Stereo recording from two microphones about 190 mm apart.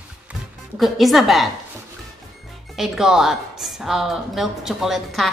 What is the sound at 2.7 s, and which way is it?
A woman's voice, centre (ahead or behind).